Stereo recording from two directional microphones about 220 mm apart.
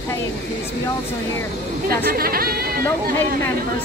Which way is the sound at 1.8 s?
40° right (ahead or behind).